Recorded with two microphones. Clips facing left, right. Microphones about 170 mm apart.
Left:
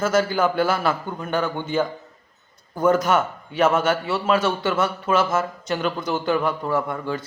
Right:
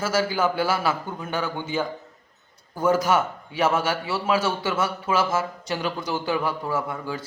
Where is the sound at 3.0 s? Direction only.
10° right (ahead or behind).